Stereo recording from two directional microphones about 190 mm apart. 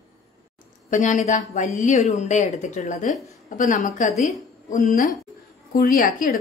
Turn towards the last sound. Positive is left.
turn(degrees=45)  # may be behind; listen again after turning